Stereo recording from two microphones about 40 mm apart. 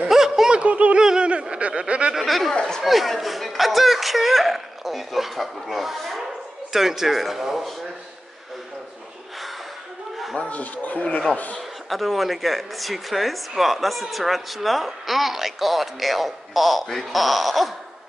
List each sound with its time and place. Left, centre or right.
0.1 s snicker: centre
0.5 s snicker: right
0.9 s a sound: right
2.1 s a sound: centre
2.5 s chatter: centre
2.8 s a sound: centre
6.7 s a man's voice: centre
10.5 s speech: left
11.9 s speech: centre